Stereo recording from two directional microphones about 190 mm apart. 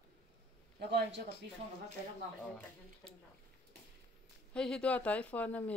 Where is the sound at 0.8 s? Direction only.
60° right (ahead or behind).